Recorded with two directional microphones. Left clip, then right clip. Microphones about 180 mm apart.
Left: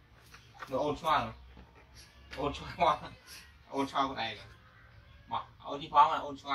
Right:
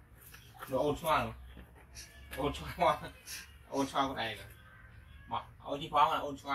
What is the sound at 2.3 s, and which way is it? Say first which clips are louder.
Speech: left 1 dB; 10° left (ahead or behind).